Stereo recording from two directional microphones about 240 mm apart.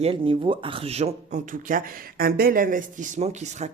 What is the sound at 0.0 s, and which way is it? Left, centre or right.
Speech, right.